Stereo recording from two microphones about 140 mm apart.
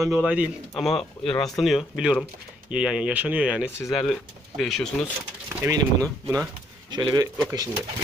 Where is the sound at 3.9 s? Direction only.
Centre (ahead or behind).